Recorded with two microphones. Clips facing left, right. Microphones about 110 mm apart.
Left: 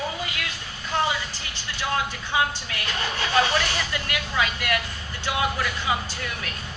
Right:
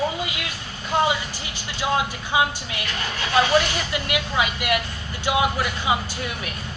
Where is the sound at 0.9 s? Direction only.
15° right (ahead or behind).